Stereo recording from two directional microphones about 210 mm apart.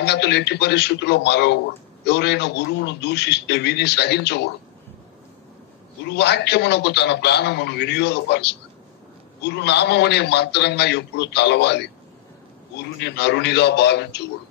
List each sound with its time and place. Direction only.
0.0 s a man's voice: 55° left (ahead or behind)
6.0 s a man's voice: 55° left (ahead or behind)